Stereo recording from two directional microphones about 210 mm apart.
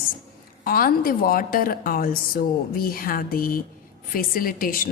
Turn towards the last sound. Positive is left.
turn(degrees=40)  # may be behind; listen again after turning